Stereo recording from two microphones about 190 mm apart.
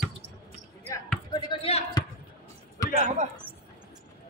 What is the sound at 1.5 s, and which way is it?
Basketball bounce, 30° left (ahead or behind).